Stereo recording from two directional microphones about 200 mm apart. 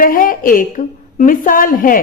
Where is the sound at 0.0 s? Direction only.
45° left (ahead or behind).